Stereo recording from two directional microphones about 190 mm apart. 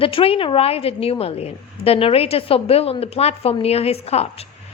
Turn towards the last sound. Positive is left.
turn(degrees=35)  # may be behind; listen again after turning